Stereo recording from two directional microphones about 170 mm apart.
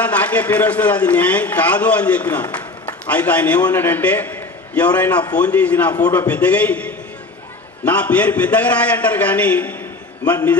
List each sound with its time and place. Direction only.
0.0 s a man's voice: 10° left (ahead or behind)